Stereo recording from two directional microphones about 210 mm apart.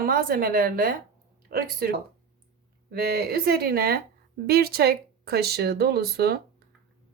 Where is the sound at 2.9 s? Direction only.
45° right (ahead or behind).